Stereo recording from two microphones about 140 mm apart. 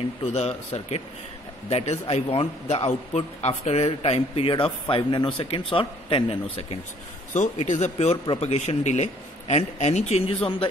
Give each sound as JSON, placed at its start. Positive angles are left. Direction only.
{"t": 0.2, "sound": "a man's voice", "side_deg": 45}
{"t": 7.3, "sound": "a man's voice", "side_deg": 60}